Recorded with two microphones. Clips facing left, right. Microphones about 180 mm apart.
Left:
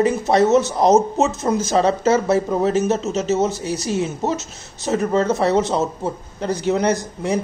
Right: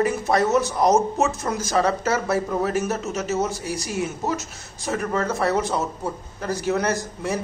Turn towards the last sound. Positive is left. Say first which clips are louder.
# left 5 dB
turn(degrees=20)  # may be behind; listen again after turning